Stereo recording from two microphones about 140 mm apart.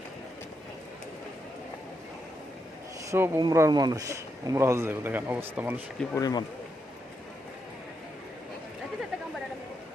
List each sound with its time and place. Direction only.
3.1 s speech: 20° right (ahead or behind)
6.1 s speech: 30° left (ahead or behind)